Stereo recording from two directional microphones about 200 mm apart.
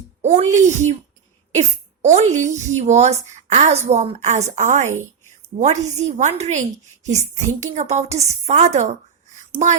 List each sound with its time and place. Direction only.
0.2 s a woman's voice: 35° right (ahead or behind)